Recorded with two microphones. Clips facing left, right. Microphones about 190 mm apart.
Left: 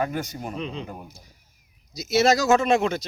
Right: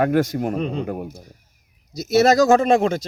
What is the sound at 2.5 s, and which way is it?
Speech, 35° right (ahead or behind).